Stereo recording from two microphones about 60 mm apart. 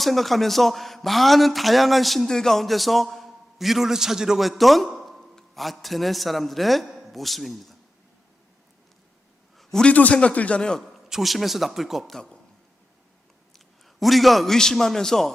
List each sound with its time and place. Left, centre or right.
0.0 s a man's voice: centre
9.8 s a man's voice: left
11.1 s a man's voice: centre
13.5 s a man's voice: centre